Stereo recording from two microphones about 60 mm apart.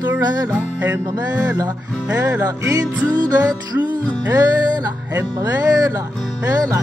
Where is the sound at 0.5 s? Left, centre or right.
Right.